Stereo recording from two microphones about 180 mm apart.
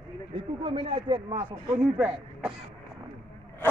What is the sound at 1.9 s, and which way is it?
Speech, 10° right (ahead or behind).